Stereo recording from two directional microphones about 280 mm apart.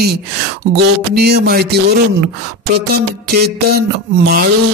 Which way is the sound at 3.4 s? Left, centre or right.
Right.